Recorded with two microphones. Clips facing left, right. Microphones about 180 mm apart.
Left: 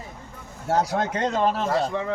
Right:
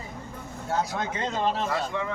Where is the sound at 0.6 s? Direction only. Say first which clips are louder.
Left 5 dB; 70° left (ahead or behind).